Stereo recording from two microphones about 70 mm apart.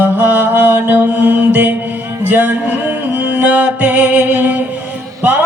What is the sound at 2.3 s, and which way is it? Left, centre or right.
Music, right.